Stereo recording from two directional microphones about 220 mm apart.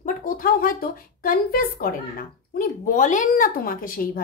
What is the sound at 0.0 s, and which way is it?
A woman's voice, 40° left (ahead or behind).